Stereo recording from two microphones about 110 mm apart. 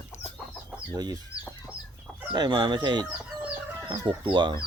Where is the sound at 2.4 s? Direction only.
40° right (ahead or behind).